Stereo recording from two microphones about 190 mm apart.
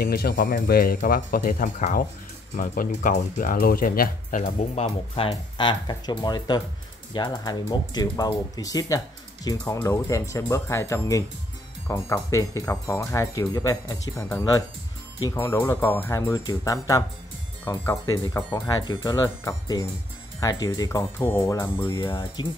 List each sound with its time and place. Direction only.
0.0 s speech: 55° left (ahead or behind); by 22.5 s 25° left (ahead or behind)